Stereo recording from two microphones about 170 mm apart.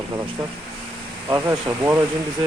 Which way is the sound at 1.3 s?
15° right (ahead or behind).